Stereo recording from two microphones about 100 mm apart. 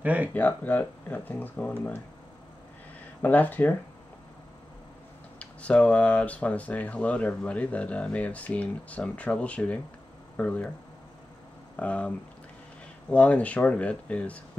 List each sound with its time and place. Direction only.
0.0 s speech: 15° right (ahead or behind)
0.3 s speech: 20° left (ahead or behind)
3.2 s speech: 15° left (ahead or behind)
5.4 s speech: 10° left (ahead or behind)
11.7 s speech: 15° left (ahead or behind)
13.1 s speech: 15° left (ahead or behind)